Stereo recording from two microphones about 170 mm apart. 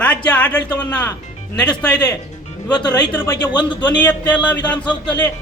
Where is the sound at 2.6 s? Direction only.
25° left (ahead or behind).